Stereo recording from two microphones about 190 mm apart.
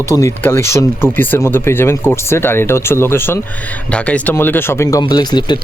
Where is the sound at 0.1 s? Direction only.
15° left (ahead or behind).